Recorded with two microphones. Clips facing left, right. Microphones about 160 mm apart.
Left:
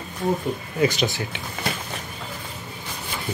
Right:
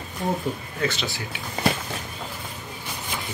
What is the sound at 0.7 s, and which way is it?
Speech, 15° left (ahead or behind).